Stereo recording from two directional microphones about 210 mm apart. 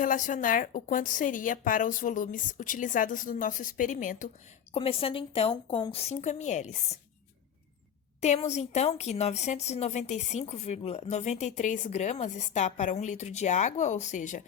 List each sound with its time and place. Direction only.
0.0 s a woman's voice: 40° left (ahead or behind)
4.7 s a woman's voice: 25° left (ahead or behind)
8.2 s a woman's voice: 30° left (ahead or behind)